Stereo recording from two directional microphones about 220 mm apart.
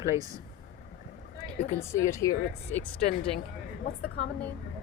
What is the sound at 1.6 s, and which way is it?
Speech, 35° left (ahead or behind).